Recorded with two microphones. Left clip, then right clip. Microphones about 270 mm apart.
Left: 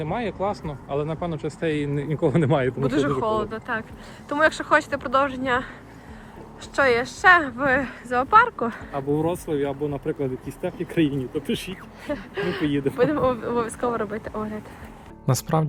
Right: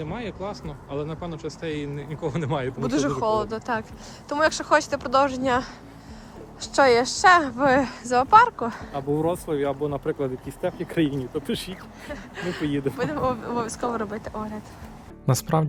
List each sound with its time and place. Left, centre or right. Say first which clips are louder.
0.1 s speech: left 6 dB; left
2.8 s speech: left 1 dB; centre
6.7 s speech: right 2 dB; centre
9.1 s speech: even; centre
15.3 s speech: even; centre